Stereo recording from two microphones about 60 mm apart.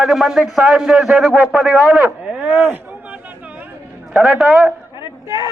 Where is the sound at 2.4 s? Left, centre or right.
Right.